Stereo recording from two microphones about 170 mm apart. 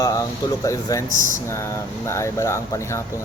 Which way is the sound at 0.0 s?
20° left (ahead or behind).